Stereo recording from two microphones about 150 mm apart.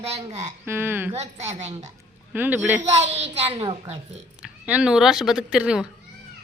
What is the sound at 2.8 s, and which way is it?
A child's voice, 45° right (ahead or behind).